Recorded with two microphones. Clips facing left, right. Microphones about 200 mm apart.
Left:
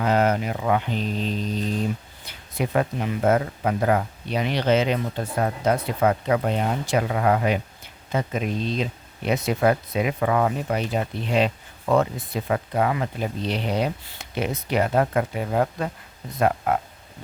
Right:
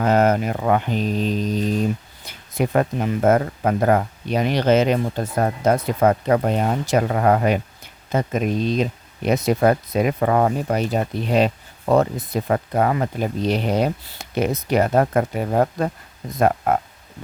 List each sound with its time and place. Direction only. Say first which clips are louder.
0.0 s speech: right 4 dB; 45° right (ahead or behind)
2.6 s speech: right 4 dB; 45° right (ahead or behind)